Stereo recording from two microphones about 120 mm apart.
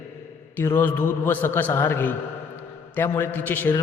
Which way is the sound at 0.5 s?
20° left (ahead or behind).